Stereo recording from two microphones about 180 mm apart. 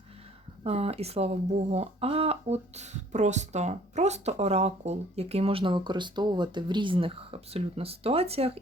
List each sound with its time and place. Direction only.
0.6 s speech: 35° right (ahead or behind)